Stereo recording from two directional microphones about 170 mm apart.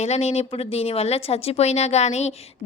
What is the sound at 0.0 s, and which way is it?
A woman's voice, 40° left (ahead or behind).